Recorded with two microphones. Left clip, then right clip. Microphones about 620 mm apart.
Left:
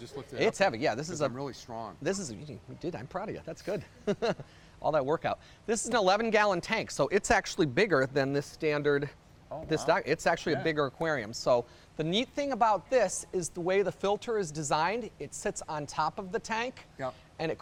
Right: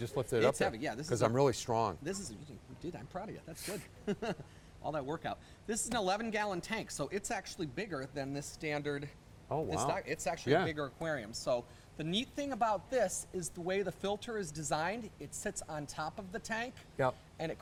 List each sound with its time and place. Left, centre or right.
0.0 s a sound: right
0.3 s speech: left
1.1 s speech: right
2.0 s a man's voice: left